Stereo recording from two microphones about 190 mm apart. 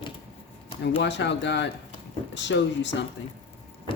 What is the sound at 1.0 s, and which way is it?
Speech, 70° left (ahead or behind).